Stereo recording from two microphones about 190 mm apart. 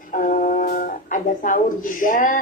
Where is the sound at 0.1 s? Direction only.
45° left (ahead or behind).